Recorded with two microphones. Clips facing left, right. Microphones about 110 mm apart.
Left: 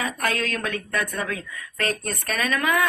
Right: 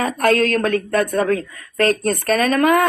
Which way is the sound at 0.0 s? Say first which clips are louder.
Right 10 dB; 50° right (ahead or behind).